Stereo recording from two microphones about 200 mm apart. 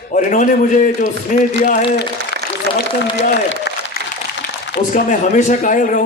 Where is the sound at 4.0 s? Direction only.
50° left (ahead or behind).